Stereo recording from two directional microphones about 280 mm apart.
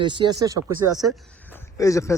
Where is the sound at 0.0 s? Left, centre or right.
Centre.